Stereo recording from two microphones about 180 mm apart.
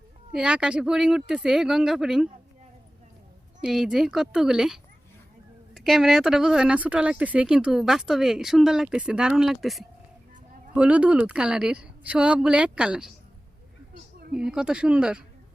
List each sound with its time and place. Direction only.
0.3 s speech: 5° right (ahead or behind)
3.6 s speech: centre (ahead or behind)
14.3 s speech: 5° right (ahead or behind)